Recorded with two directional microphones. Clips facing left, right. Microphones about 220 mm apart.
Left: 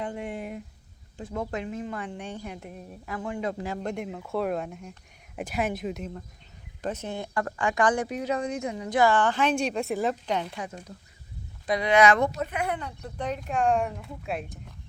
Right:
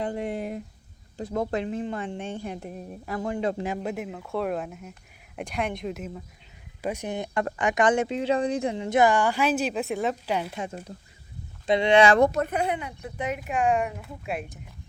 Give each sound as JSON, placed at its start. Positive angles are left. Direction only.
{"t": 0.0, "sound": "a woman's voice", "side_deg": -35}
{"t": 3.8, "sound": "speech", "side_deg": -5}
{"t": 6.8, "sound": "speech", "side_deg": -15}
{"t": 10.5, "sound": "speech", "side_deg": -25}
{"t": 12.3, "sound": "a woman's voice", "side_deg": -50}
{"t": 12.6, "sound": "speech", "side_deg": -15}